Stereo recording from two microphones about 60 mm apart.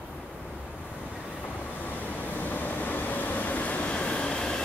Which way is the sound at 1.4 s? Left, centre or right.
Left.